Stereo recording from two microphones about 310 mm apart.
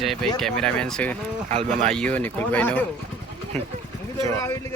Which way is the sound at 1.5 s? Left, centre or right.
Right.